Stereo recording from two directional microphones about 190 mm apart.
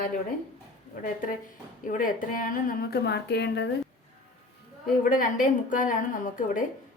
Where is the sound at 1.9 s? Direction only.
45° left (ahead or behind); by 3.7 s 65° left (ahead or behind).